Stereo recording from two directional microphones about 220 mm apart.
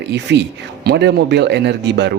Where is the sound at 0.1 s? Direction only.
50° right (ahead or behind).